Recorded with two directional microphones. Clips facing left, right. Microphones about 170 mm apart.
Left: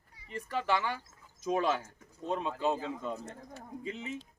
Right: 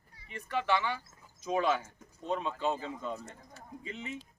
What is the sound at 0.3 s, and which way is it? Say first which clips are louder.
Speech: right 1 dB; 40° left (ahead or behind).